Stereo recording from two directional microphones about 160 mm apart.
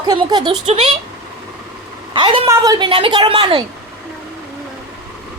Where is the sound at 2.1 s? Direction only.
30° right (ahead or behind).